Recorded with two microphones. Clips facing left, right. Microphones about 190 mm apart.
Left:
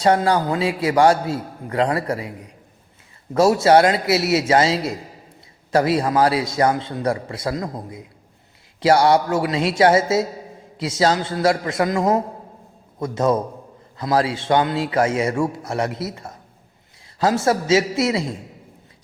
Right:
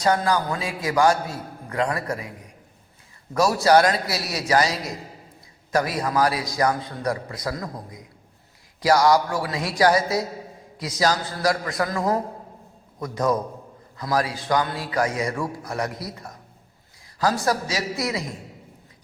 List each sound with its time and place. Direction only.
0.0 s a man's voice: 30° left (ahead or behind)
3.3 s a man's voice: 25° left (ahead or behind)